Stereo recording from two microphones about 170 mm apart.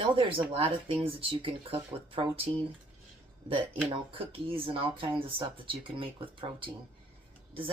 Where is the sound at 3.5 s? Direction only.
30° right (ahead or behind).